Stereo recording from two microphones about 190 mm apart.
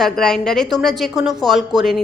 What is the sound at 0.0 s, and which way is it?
A woman's voice, centre (ahead or behind).